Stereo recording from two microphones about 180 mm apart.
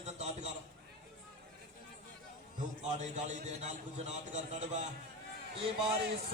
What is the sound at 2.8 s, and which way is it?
A man's voice, 40° right (ahead or behind).